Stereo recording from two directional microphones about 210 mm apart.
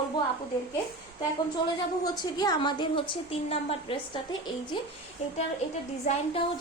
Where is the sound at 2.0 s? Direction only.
20° left (ahead or behind).